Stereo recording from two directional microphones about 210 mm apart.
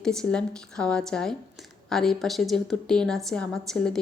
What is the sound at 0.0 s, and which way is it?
Speech, centre (ahead or behind).